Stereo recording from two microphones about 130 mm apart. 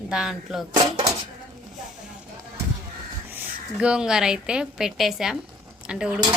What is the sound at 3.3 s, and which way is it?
A woman's voice, 10° right (ahead or behind).